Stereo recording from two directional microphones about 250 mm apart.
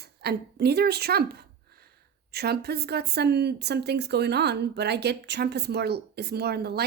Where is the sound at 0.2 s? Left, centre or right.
Right.